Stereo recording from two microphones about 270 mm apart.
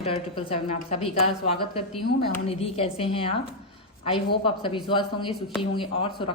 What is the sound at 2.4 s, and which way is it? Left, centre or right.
Speech, left.